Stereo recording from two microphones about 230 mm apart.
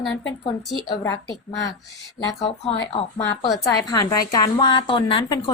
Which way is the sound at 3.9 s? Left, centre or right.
Centre.